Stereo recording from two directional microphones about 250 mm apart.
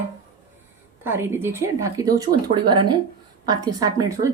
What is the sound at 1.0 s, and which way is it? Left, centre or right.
A woman's voice, centre.